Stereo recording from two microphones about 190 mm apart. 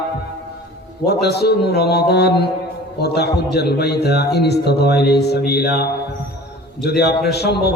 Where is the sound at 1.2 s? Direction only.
60° left (ahead or behind).